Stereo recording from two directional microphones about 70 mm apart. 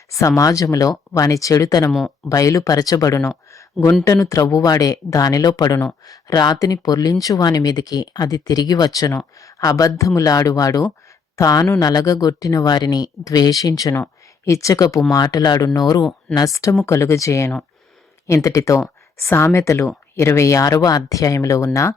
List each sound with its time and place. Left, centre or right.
0.1 s speech: left
1.9 s speech: centre
2.3 s speech: left
4.2 s speech: left
14.4 s speech: left
16.3 s speech: left